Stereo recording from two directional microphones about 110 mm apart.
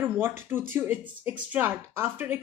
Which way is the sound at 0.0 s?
20° right (ahead or behind).